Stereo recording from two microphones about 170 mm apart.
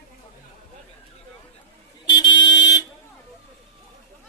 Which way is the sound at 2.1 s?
25° left (ahead or behind).